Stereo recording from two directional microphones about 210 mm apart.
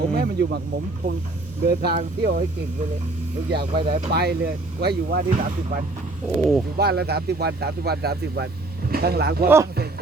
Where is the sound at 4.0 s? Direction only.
45° right (ahead or behind).